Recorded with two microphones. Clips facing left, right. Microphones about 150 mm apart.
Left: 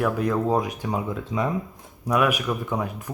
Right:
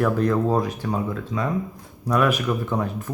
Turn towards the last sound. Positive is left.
turn(degrees=10)  # may be behind; listen again after turning